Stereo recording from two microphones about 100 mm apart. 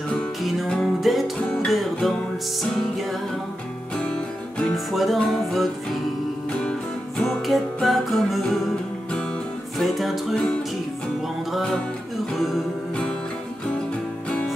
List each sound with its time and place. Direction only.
0.4 s music: centre (ahead or behind)
3.9 s music: 10° left (ahead or behind)
7.2 s music: centre (ahead or behind)
9.8 s music: centre (ahead or behind)
11.5 s music: 5° left (ahead or behind)